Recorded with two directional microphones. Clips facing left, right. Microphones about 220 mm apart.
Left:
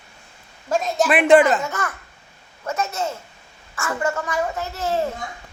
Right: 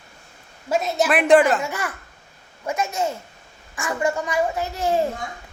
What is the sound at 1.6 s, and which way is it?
A woman's voice, 10° right (ahead or behind).